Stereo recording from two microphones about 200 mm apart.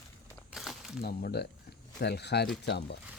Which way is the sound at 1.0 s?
50° left (ahead or behind).